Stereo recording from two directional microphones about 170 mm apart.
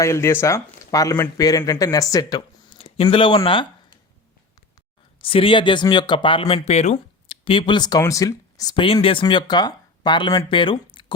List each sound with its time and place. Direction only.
0.0 s speech: 15° left (ahead or behind)
2.7 s speech: 35° left (ahead or behind)
5.2 s speech: 30° left (ahead or behind)